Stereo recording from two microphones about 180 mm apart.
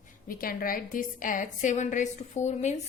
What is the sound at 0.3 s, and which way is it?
A woman's voice, 50° left (ahead or behind).